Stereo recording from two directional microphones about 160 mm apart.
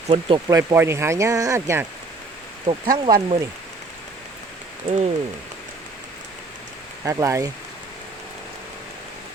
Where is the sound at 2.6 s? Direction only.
30° right (ahead or behind).